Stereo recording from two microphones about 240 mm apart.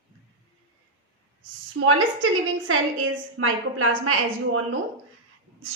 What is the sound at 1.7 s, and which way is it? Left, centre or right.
A woman's voice, right.